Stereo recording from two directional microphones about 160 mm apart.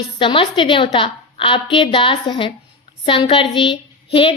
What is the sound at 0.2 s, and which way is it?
A woman's voice, 30° left (ahead or behind).